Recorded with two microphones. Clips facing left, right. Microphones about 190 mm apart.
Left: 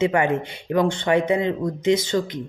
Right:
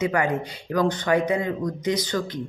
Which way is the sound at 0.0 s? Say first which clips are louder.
Left 3 dB; 25° left (ahead or behind).